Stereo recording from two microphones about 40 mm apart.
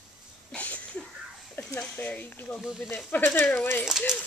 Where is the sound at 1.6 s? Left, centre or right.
Left.